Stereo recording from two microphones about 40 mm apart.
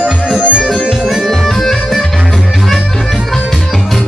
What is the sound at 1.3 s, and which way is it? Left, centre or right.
Music, centre.